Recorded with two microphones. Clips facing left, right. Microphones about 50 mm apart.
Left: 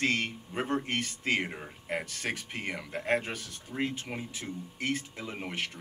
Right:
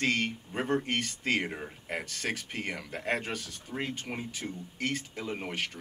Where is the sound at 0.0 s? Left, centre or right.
Centre.